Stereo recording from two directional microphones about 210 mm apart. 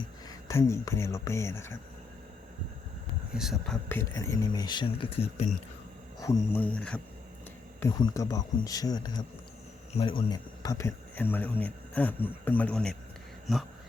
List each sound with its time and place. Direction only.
0.3 s speech: 15° left (ahead or behind)
3.3 s speech: centre (ahead or behind)
3.8 s speech: 15° left (ahead or behind); by 5.5 s 30° left (ahead or behind)
6.1 s speech: 10° left (ahead or behind)